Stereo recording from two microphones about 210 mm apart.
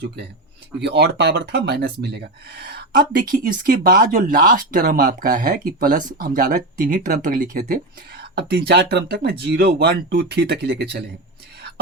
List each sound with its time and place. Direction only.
0.8 s speech: 55° right (ahead or behind)